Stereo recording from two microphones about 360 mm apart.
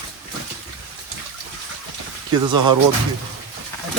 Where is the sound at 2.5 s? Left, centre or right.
Right.